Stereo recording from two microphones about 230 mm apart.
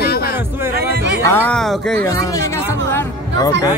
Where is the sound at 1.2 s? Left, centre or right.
Centre.